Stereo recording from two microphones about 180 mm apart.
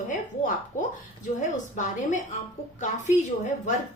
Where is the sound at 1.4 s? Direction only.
45° left (ahead or behind).